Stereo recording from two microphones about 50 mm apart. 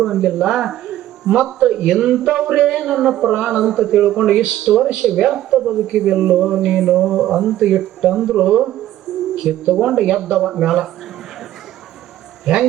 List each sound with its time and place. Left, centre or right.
0.0 s speech: centre
9.1 s a sound: centre
9.4 s speech: centre